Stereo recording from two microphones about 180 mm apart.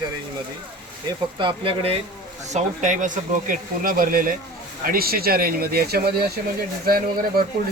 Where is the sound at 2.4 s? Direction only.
40° right (ahead or behind); by 6.1 s 60° right (ahead or behind).